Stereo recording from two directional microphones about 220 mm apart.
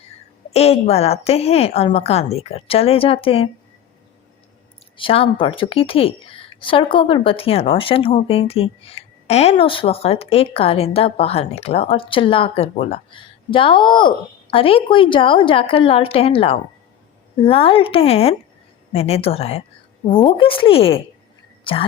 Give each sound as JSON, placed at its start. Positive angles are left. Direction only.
{"t": 0.5, "sound": "a woman's voice", "side_deg": 25}
{"t": 4.9, "sound": "a woman's voice", "side_deg": 25}